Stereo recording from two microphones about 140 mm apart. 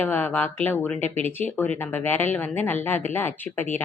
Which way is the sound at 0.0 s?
15° left (ahead or behind).